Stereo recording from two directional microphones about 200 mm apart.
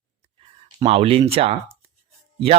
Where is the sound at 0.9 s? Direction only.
30° right (ahead or behind).